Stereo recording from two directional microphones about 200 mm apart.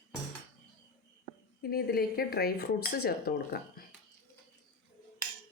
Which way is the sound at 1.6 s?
50° left (ahead or behind).